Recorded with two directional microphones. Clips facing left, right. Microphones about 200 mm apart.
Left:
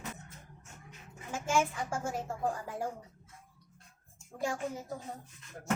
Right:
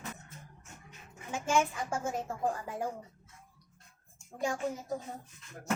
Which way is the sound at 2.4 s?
20° right (ahead or behind).